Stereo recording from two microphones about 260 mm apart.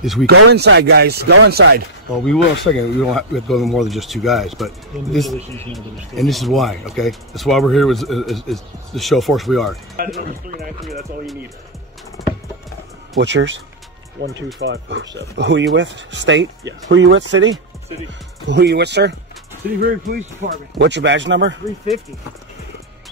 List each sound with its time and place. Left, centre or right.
0.0 s speech: centre
0.5 s speech: right
2.2 s speech: centre
10.0 s speech: right
12.2 s clip-clop: centre
13.2 s speech: right